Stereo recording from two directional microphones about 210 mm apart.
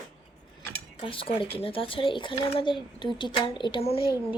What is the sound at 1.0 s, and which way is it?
A woman's voice, 25° left (ahead or behind).